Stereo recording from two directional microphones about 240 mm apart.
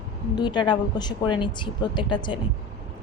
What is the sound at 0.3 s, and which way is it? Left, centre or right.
Speech, centre.